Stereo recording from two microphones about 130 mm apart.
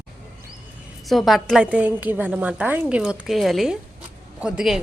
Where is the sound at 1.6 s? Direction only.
10° right (ahead or behind).